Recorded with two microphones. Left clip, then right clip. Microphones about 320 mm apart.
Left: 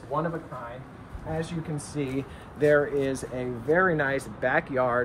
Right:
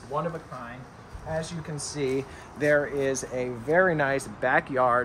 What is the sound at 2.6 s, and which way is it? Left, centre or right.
Speech, centre.